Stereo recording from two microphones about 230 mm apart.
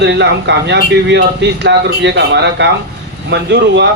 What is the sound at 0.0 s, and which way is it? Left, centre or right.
Speech, right.